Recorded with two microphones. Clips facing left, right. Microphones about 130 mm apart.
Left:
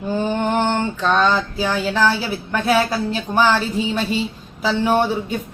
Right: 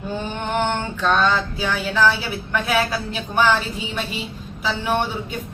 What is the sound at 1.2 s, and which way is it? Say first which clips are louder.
Speech: left 2 dB; 35° left (ahead or behind).